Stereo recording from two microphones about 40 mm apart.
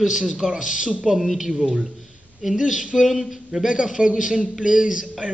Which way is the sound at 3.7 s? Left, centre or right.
Right.